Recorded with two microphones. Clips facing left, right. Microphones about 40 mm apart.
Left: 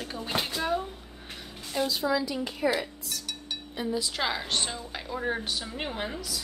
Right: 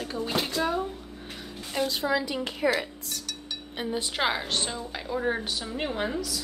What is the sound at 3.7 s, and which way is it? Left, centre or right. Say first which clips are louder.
Cutlery: even; right.